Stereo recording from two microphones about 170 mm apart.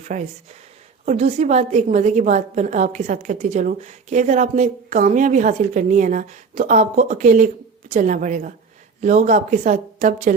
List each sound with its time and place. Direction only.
0.1 s a woman's voice: 50° right (ahead or behind)